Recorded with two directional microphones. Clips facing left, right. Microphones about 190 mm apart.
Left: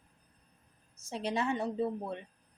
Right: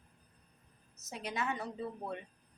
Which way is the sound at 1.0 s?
30° left (ahead or behind).